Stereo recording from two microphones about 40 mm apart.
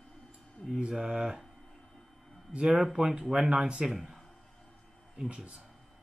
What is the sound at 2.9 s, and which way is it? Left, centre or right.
Speech, centre.